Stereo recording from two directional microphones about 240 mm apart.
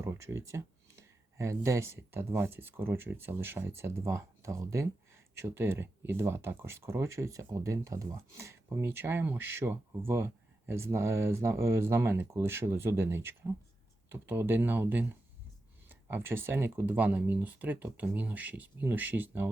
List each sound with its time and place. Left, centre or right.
0.0 s speech: centre